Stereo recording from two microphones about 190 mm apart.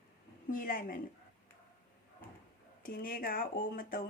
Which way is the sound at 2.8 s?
50° left (ahead or behind).